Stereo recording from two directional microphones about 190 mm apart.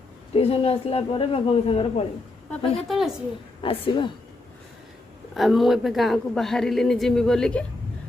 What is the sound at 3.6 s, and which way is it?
Speech, 30° left (ahead or behind).